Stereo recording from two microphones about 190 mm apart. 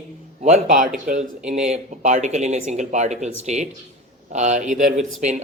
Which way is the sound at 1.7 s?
40° right (ahead or behind).